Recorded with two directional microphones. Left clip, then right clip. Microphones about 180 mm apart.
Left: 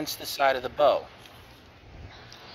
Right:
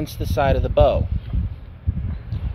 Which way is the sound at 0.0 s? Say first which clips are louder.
Right 3 dB; 35° right (ahead or behind).